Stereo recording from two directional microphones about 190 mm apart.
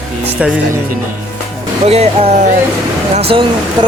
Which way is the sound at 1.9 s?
30° right (ahead or behind).